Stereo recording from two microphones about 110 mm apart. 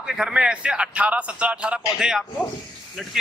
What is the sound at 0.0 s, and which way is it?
A man's voice, 5° right (ahead or behind).